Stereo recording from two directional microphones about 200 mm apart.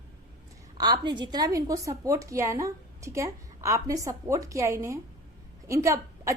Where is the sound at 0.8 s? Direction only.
20° right (ahead or behind).